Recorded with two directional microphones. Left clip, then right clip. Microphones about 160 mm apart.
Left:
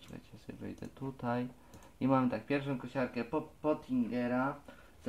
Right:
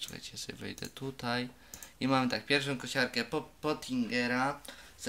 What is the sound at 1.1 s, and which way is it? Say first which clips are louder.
Speech: right 1 dB; 5° right (ahead or behind).